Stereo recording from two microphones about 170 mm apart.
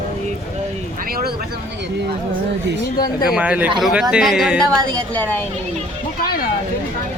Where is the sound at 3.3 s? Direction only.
5° right (ahead or behind).